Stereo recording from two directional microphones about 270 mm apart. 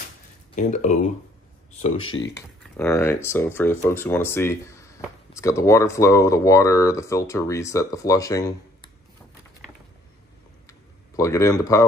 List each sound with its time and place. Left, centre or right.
0.6 s speech: left
2.0 s speech: left
2.3 s speech: centre
10.7 s a sound: centre